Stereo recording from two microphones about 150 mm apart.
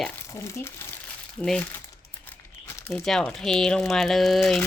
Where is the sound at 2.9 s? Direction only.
5° left (ahead or behind).